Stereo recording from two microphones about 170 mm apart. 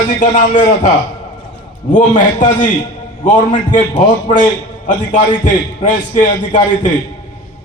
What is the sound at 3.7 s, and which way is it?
A man's voice, 45° left (ahead or behind).